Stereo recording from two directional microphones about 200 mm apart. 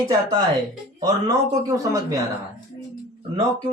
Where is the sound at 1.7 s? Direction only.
15° right (ahead or behind).